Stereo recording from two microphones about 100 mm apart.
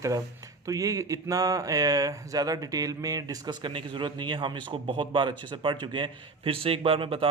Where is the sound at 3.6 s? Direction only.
55° right (ahead or behind).